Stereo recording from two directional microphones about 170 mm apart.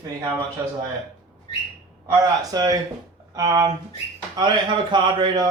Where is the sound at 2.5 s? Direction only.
20° right (ahead or behind).